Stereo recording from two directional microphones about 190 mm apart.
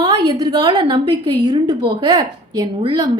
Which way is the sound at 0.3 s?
20° right (ahead or behind).